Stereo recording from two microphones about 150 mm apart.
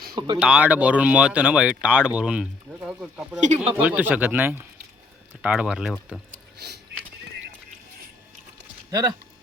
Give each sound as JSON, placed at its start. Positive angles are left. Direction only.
{"t": 0.1, "sound": "speech", "side_deg": -30}
{"t": 0.3, "sound": "speech", "side_deg": -5}
{"t": 3.4, "sound": "speech", "side_deg": -45}
{"t": 3.8, "sound": "speech", "side_deg": -10}
{"t": 6.3, "sound": "a sound", "side_deg": -90}
{"t": 8.9, "sound": "speech", "side_deg": -25}